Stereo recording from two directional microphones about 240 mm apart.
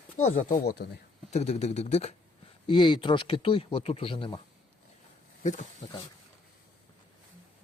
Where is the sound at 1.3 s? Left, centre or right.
Left.